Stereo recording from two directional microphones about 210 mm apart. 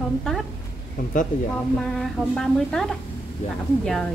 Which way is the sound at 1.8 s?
Centre (ahead or behind).